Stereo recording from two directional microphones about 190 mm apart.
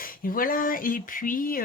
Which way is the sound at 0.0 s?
50° left (ahead or behind).